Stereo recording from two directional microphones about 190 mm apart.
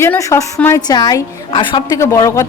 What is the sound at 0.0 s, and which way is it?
A woman's voice, 15° left (ahead or behind).